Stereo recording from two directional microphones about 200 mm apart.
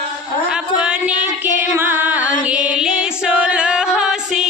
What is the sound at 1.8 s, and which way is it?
Music, 10° right (ahead or behind).